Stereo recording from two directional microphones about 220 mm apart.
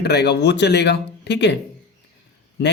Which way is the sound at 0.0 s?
50° left (ahead or behind).